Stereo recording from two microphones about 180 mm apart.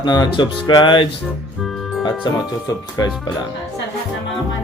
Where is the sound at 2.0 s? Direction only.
20° left (ahead or behind).